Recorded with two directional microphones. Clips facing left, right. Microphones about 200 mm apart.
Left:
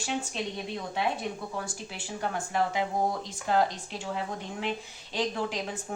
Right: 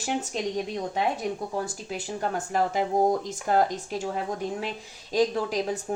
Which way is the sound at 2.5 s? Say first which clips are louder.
Right 4 dB; 40° right (ahead or behind).